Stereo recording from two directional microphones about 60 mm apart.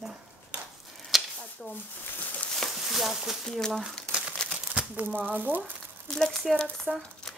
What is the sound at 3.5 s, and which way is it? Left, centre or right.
Speech, centre.